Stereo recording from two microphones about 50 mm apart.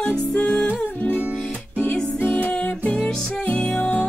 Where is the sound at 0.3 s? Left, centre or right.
Left.